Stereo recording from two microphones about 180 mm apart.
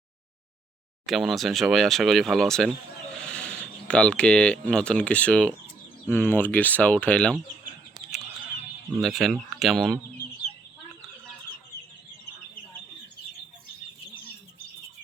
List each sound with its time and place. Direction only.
1.0 s speech: centre (ahead or behind)
9.0 s speech: centre (ahead or behind)